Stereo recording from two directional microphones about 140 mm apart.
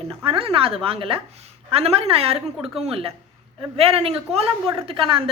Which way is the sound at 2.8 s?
45° right (ahead or behind).